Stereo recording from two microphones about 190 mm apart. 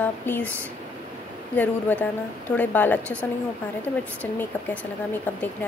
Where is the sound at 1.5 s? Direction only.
10° left (ahead or behind).